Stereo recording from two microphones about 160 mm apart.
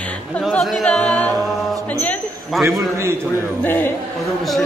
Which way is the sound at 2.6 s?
15° right (ahead or behind).